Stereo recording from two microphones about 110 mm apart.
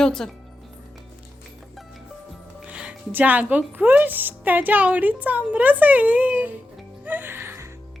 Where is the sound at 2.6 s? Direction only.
10° right (ahead or behind).